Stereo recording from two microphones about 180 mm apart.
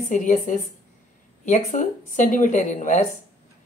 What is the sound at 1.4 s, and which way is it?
A woman's voice, 45° left (ahead or behind).